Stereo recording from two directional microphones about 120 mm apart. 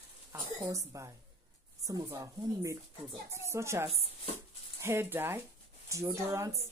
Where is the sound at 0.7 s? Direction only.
25° right (ahead or behind).